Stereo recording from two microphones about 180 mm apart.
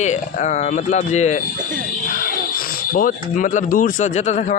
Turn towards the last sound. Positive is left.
turn(degrees=40)  # may be behind; listen again after turning